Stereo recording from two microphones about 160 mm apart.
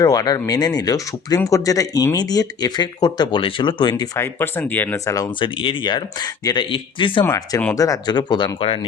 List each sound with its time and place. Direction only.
0.0 s speech: 25° left (ahead or behind)
4.2 s speech: 15° left (ahead or behind)
5.1 s speech: 30° left (ahead or behind)
7.3 s speech: 20° left (ahead or behind)